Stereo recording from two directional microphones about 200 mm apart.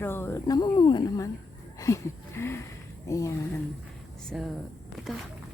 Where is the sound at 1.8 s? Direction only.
15° left (ahead or behind).